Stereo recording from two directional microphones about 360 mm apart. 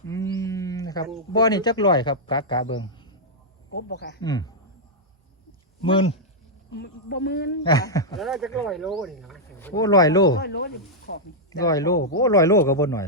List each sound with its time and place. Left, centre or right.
0.1 s a sound: centre
1.3 s a man's voice: centre
3.8 s speech: left
4.2 s a man's voice: centre
5.8 s a man's voice: centre
6.7 s speech: left
7.6 s speech: centre
10.3 s speech: left
11.6 s a man's voice: centre